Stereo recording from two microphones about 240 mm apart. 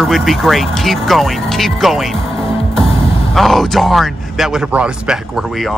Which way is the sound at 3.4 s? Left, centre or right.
Centre.